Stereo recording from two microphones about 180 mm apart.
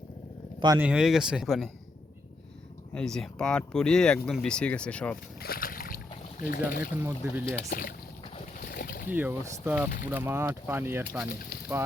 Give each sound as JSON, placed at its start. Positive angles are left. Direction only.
{"t": 0.8, "sound": "speech", "side_deg": -5}
{"t": 2.9, "sound": "speech", "side_deg": 5}
{"t": 5.1, "sound": "speech", "side_deg": 55}
{"t": 6.9, "sound": "speech", "side_deg": -10}
{"t": 7.7, "sound": "speech", "side_deg": 55}
{"t": 8.4, "sound": "boat", "side_deg": 50}
{"t": 9.0, "sound": "speech", "side_deg": -10}
{"t": 11.3, "sound": "speech", "side_deg": 60}